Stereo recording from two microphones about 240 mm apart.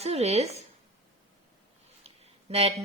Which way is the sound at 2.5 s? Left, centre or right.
Right.